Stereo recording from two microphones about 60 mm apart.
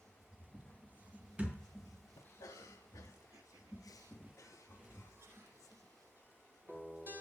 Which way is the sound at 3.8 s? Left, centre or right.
Left.